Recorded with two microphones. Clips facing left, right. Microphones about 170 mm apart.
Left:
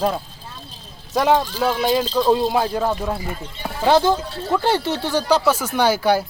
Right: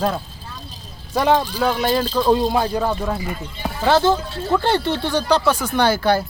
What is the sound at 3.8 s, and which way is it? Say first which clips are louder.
Speech: even; 15° left (ahead or behind).